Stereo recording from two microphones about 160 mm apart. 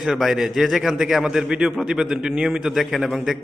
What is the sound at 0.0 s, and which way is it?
A man's voice, 5° right (ahead or behind).